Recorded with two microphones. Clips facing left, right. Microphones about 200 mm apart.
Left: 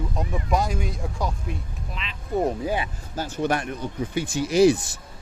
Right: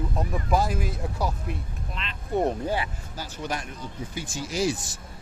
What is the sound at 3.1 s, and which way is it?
Speech, 50° left (ahead or behind).